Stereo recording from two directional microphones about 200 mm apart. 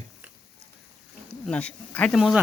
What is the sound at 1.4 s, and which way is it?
Speech, 5° left (ahead or behind).